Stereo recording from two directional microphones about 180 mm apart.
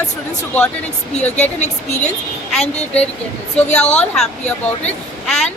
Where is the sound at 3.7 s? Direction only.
40° left (ahead or behind).